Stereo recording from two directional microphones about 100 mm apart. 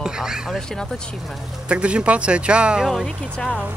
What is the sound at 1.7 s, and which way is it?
Speech, 10° right (ahead or behind).